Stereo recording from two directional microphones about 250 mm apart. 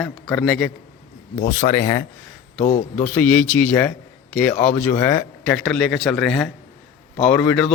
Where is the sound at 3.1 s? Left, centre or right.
Centre.